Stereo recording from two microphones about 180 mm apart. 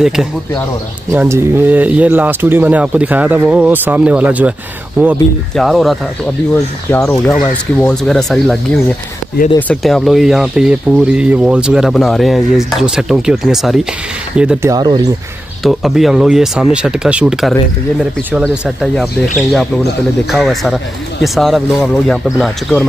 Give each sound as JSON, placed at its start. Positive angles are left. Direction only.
{"t": 0.0, "sound": "speech", "side_deg": -5}
{"t": 6.9, "sound": "speech", "side_deg": 10}
{"t": 14.7, "sound": "speech", "side_deg": -20}
{"t": 15.6, "sound": "speech", "side_deg": 0}